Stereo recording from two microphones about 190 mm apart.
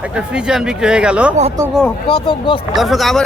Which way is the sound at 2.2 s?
25° left (ahead or behind).